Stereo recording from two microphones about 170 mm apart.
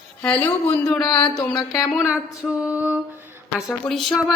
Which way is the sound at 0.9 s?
25° left (ahead or behind).